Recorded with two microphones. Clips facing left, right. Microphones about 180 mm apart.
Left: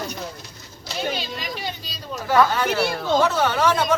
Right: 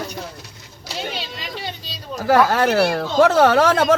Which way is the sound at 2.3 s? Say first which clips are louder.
Right 4 dB; 80° right.